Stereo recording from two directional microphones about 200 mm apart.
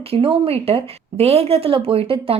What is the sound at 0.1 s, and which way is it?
Speech, 30° right (ahead or behind).